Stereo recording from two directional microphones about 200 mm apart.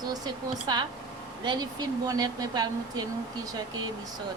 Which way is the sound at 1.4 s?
20° right (ahead or behind).